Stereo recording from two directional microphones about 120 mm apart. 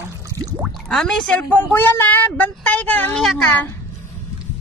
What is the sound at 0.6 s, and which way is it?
Speech, centre (ahead or behind).